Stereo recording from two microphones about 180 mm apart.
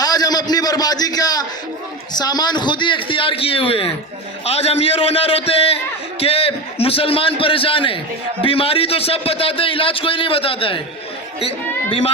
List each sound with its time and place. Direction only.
0.0 s a man's voice: 20° left (ahead or behind)